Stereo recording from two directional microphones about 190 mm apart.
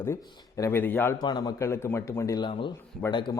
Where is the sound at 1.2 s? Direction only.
20° left (ahead or behind).